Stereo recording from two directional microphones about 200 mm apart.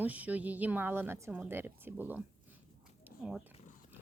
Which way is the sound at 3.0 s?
5° right (ahead or behind).